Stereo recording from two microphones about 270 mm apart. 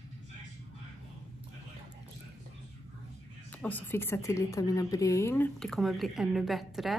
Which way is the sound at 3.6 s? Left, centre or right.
Centre.